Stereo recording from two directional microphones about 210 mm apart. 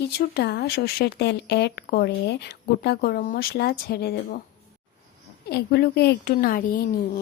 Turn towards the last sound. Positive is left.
turn(degrees=45)  # may be behind; listen again after turning